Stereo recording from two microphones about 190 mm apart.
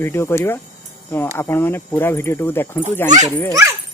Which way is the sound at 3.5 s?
15° right (ahead or behind).